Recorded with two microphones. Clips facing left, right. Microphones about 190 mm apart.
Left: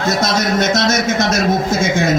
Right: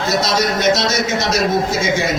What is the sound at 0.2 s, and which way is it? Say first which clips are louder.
A man's voice: left 1 dB; 50° left (ahead or behind).